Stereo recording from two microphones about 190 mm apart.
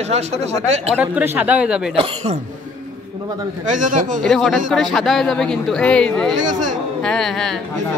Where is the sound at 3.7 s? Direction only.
40° right (ahead or behind).